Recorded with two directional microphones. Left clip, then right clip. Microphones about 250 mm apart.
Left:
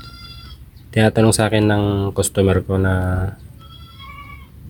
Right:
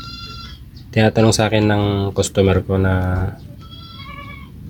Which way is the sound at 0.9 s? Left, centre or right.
Centre.